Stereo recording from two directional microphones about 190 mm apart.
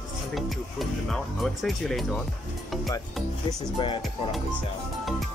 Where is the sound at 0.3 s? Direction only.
Centre (ahead or behind).